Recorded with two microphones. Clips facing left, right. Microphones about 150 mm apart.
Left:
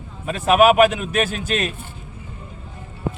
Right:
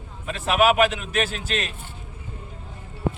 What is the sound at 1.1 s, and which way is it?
Speech, 15° left (ahead or behind).